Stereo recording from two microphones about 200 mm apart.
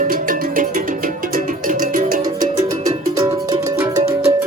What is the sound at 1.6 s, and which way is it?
Music, 40° right (ahead or behind).